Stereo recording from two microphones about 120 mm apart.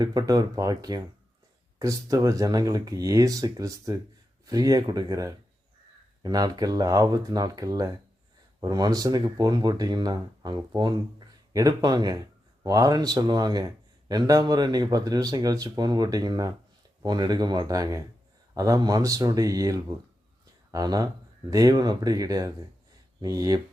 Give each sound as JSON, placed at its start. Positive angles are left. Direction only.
{"t": 0.0, "sound": "speech", "side_deg": -30}